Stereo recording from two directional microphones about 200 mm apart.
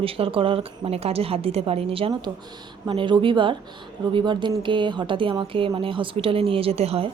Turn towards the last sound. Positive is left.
turn(degrees=-30)  # may be behind; listen again after turning